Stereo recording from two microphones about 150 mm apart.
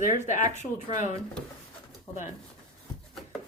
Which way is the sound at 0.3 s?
55° left (ahead or behind).